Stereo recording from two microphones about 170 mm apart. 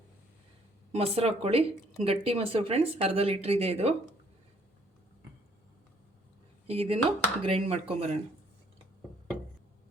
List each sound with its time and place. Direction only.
0.9 s speech: 35° right (ahead or behind)
6.7 s speech: 35° right (ahead or behind)